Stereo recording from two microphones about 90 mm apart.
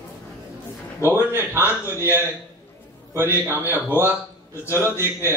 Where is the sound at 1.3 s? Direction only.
25° right (ahead or behind).